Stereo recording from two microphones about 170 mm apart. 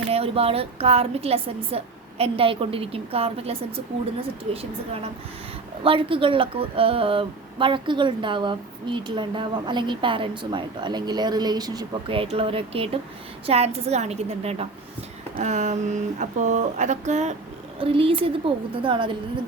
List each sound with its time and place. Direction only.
0.1 s a woman's voice: 35° right (ahead or behind)
5.8 s a woman's voice: 30° right (ahead or behind)
17.7 s a woman's voice: 35° right (ahead or behind)